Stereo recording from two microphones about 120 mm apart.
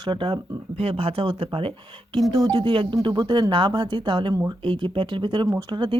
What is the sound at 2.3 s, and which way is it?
Speech, 35° right (ahead or behind).